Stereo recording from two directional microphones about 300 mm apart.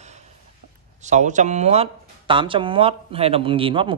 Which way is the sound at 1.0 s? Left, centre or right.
Right.